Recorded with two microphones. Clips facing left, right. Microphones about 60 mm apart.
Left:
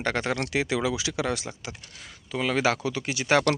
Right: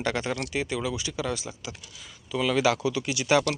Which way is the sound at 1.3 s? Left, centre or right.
Left.